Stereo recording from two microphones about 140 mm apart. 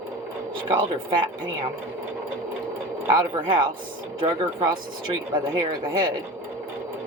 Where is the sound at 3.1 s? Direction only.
35° right (ahead or behind).